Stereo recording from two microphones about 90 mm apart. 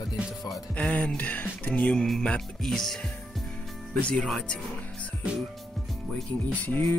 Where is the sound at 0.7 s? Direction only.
10° left (ahead or behind).